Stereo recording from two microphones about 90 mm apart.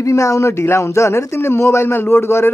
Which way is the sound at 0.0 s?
35° left (ahead or behind).